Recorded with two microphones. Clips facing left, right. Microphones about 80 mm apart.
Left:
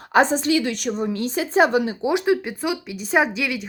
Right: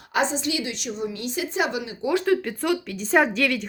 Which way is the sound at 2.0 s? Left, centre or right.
Centre.